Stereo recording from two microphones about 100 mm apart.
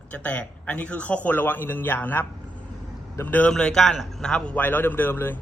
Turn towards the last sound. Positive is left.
turn(degrees=20)  # may be behind; listen again after turning